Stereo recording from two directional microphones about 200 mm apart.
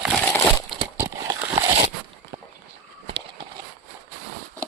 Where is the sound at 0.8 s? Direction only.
20° right (ahead or behind).